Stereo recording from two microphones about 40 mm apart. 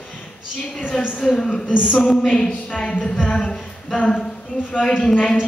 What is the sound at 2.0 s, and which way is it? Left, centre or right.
Speech, centre.